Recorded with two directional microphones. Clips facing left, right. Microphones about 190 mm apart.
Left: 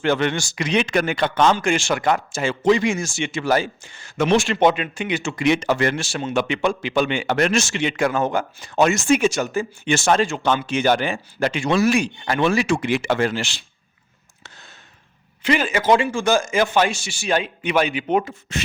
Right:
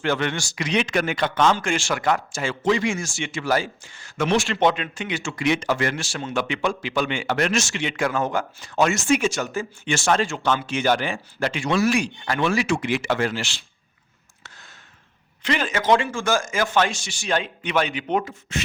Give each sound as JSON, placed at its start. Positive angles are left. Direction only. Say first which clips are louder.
{"t": 0.0, "sound": "a man's voice", "louder": "left 4 dB", "side_deg": 20}
{"t": 1.5, "sound": "speech", "louder": "left 4 dB", "side_deg": 20}
{"t": 4.6, "sound": "chopping", "louder": "left 3 dB", "side_deg": 10}
{"t": 5.7, "sound": "speech", "louder": "left 4 dB", "side_deg": 25}
{"t": 12.7, "sound": "speech", "louder": "left 3 dB", "side_deg": 55}
{"t": 13.1, "sound": "speech", "louder": "left 3 dB", "side_deg": 20}
{"t": 15.4, "sound": "chopping", "louder": "left 3 dB", "side_deg": 10}
{"t": 18.5, "sound": "a man's voice", "louder": "left 2 dB", "side_deg": 35}